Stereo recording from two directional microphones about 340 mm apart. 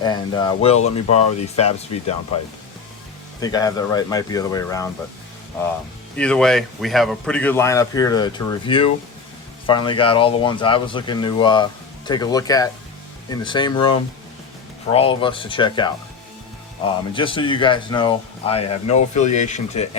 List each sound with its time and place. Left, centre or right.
0.0 s speech: centre
3.4 s speech: centre
6.1 s speech: centre